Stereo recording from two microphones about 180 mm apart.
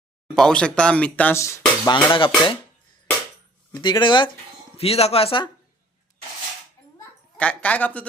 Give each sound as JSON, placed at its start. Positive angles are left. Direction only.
{"t": 0.3, "sound": "speech", "side_deg": 5}
{"t": 3.8, "sound": "speech", "side_deg": 25}
{"t": 7.3, "sound": "speech", "side_deg": 10}